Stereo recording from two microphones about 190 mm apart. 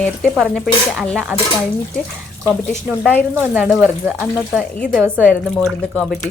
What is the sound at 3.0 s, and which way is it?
Speech, 10° left (ahead or behind).